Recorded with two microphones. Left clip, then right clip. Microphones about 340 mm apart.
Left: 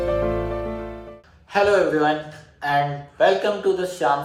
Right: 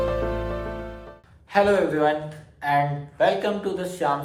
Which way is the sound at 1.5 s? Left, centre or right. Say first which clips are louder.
Left 2 dB; centre.